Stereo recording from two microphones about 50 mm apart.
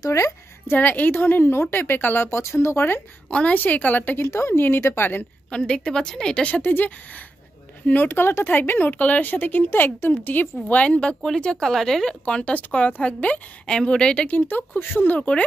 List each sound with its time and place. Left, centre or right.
0.7 s a woman's voice: left
2.2 s speech: left
3.3 s speech: left
4.3 s a woman's voice: left
5.5 s speech: centre
6.6 s speech: left
8.1 s a woman's voice: left
8.5 s speech: left
10.8 s a woman's voice: left
12.3 s a woman's voice: left
14.2 s speech: left
15.1 s a woman's voice: left